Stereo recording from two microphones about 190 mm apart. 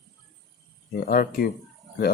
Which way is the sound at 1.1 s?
50° left (ahead or behind).